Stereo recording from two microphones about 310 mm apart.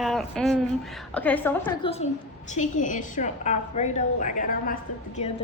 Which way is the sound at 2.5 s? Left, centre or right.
Left.